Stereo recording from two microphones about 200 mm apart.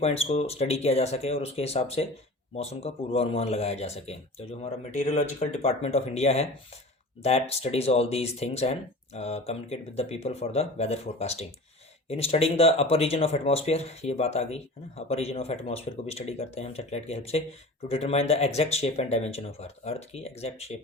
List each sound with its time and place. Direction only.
0.0 s speech: 30° left (ahead or behind)